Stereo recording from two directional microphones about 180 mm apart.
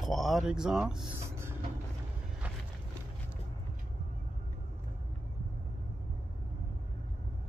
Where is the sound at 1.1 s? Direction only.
15° right (ahead or behind).